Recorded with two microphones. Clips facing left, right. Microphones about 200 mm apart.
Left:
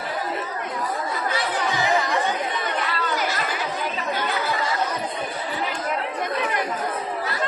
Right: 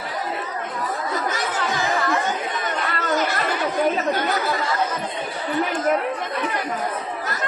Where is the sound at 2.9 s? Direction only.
45° right (ahead or behind).